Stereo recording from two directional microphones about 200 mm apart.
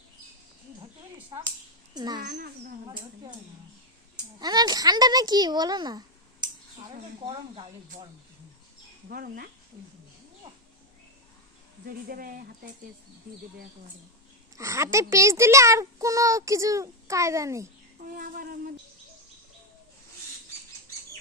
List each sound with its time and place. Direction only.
2.0 s speech: 20° right (ahead or behind)
2.2 s speech: 50° right (ahead or behind)
4.4 s speech: 20° right (ahead or behind)
9.0 s speech: 50° right (ahead or behind)
12.0 s speech: 45° right (ahead or behind)
14.5 s a child's voice: 15° right (ahead or behind)
18.0 s a sound: 45° right (ahead or behind)